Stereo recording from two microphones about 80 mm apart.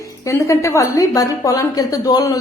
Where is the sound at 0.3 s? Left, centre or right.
Left.